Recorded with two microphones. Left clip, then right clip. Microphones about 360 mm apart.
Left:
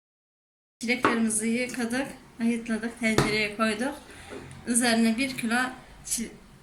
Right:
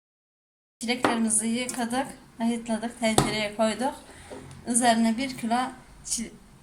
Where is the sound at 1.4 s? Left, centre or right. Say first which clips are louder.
Left 1 dB; right.